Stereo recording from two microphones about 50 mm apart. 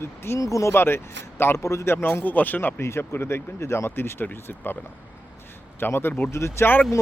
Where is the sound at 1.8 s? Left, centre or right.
Left.